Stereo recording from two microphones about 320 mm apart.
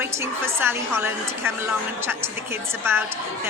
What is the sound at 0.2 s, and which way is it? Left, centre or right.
A woman's voice, centre.